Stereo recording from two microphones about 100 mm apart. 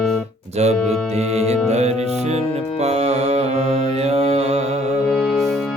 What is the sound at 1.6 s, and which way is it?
Music, 90° right.